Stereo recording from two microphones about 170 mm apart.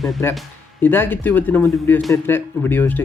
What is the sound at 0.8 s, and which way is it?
Speech, 10° left (ahead or behind).